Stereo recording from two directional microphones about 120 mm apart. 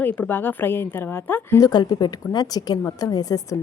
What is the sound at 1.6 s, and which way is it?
A woman's voice, 35° left (ahead or behind).